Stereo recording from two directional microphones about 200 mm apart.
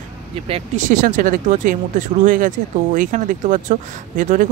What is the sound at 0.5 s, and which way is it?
Speech, 35° right (ahead or behind).